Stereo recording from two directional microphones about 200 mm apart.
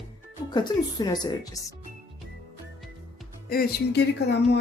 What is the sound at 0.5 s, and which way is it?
Speech, 20° left (ahead or behind).